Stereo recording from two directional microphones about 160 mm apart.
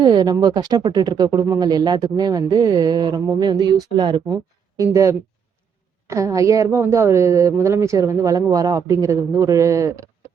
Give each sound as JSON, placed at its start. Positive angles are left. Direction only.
{"t": 0.0, "sound": "speech", "side_deg": -25}
{"t": 6.1, "sound": "speech", "side_deg": -20}